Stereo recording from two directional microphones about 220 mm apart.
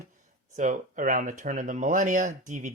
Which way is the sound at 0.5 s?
35° right (ahead or behind).